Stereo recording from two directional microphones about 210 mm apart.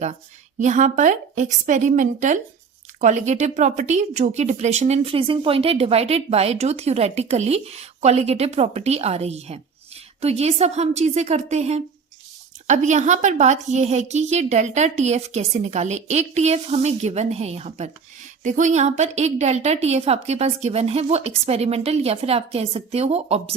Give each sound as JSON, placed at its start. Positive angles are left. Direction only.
{"t": 0.6, "sound": "speech", "side_deg": -35}